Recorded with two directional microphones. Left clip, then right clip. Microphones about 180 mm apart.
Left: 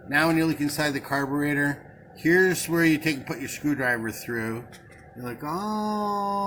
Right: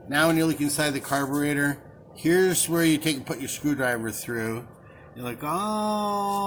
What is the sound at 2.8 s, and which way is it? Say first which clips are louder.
Speech: left 2 dB; 5° right (ahead or behind).